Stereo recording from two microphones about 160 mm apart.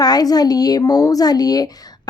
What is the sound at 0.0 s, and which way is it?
A woman's voice, 25° left (ahead or behind).